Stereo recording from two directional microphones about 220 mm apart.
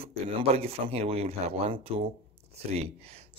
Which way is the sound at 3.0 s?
25° right (ahead or behind).